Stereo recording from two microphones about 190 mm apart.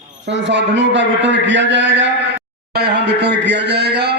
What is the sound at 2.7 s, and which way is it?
A man's voice, 60° right (ahead or behind).